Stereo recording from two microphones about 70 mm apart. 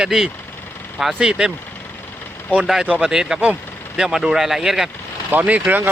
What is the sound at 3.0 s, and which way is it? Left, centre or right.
Speech, centre.